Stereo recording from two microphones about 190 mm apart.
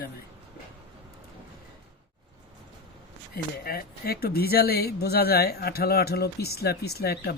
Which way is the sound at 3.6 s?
50° left (ahead or behind).